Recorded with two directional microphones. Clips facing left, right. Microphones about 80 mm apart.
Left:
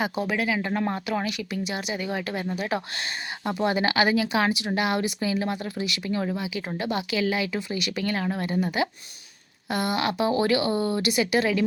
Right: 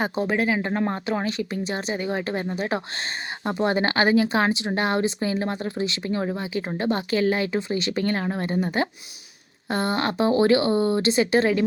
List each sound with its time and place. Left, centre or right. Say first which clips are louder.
0.0 s speech: right 3 dB; right